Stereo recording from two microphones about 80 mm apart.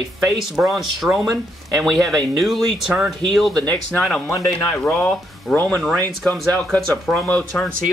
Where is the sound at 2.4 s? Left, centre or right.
Centre.